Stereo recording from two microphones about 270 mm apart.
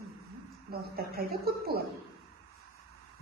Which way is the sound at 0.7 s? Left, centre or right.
Right.